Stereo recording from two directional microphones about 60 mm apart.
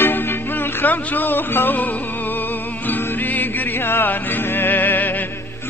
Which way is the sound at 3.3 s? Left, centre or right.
Left.